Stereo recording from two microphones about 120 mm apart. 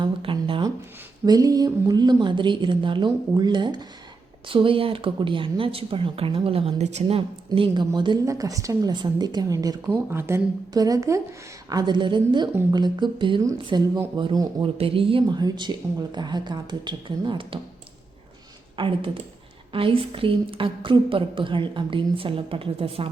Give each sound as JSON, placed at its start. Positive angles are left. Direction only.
{"t": 0.0, "sound": "a sound", "side_deg": -50}
{"t": 1.2, "sound": "a woman's voice", "side_deg": -30}
{"t": 10.1, "sound": "a woman's voice", "side_deg": -20}
{"t": 15.4, "sound": "a woman's voice", "side_deg": -35}
{"t": 18.8, "sound": "speech", "side_deg": -50}